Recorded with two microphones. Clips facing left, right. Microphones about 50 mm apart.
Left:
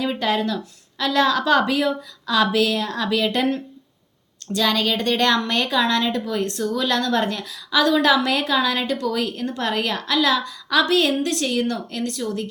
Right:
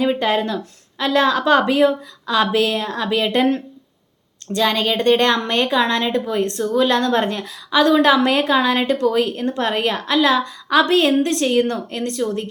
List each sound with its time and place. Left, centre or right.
0.0 s a woman's voice: right
4.5 s a woman's voice: right